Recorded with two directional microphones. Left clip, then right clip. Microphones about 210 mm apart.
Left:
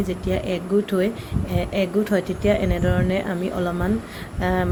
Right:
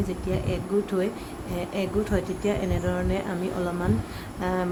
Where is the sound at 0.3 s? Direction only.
15° left (ahead or behind).